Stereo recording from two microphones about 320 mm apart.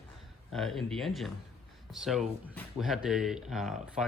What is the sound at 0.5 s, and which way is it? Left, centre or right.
Speech, centre.